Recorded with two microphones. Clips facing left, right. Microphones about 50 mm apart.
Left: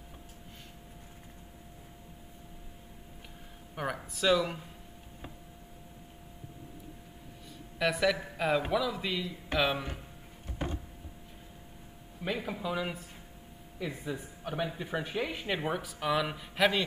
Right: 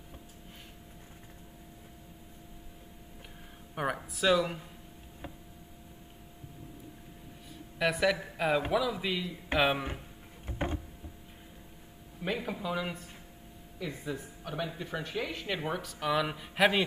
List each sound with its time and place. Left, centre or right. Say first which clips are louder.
3.7 s speech: right 2 dB; centre
7.8 s a man's voice: even; centre
9.5 s speech: right 2 dB; centre
10.4 s a sound: right 2 dB; right
12.2 s a man's voice: even; centre